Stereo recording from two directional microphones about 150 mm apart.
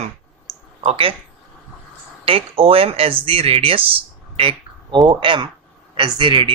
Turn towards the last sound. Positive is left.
turn(degrees=-35)  # may be behind; listen again after turning